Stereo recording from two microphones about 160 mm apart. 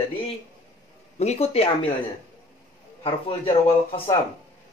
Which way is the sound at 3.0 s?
35° left (ahead or behind).